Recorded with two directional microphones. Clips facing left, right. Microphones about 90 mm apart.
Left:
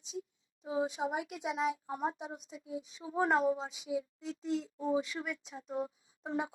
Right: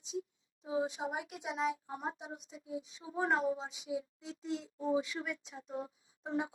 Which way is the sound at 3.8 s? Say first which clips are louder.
Left 3 dB; 40° left (ahead or behind).